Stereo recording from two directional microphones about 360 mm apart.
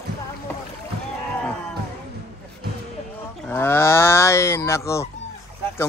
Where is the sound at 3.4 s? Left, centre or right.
Centre.